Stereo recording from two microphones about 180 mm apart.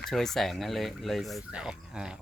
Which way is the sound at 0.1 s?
Centre (ahead or behind).